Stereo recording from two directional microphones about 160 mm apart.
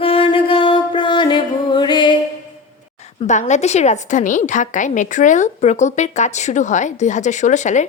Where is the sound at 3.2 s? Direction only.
45° left (ahead or behind).